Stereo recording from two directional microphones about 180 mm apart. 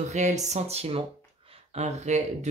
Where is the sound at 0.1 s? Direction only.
40° right (ahead or behind).